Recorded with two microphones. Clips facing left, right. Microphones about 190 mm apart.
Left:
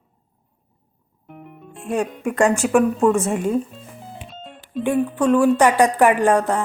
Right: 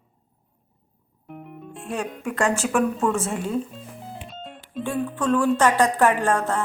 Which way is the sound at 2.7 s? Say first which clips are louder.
Left 6 dB; 5° left (ahead or behind).